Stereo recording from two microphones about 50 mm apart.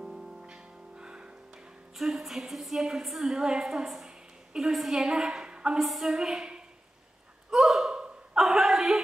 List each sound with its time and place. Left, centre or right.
0.0 s music: centre
2.0 s a woman's voice: centre
5.8 s a woman's voice: centre
7.5 s gasp: centre
8.4 s a sound: centre